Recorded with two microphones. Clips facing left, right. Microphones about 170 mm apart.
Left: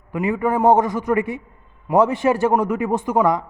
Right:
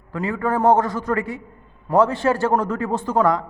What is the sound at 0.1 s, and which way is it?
A man's voice, 20° left (ahead or behind).